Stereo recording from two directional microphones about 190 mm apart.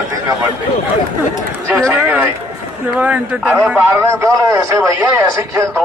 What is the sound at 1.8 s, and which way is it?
A man's voice, 5° right (ahead or behind).